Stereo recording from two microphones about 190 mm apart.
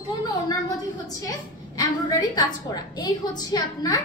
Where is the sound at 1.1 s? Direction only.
20° left (ahead or behind).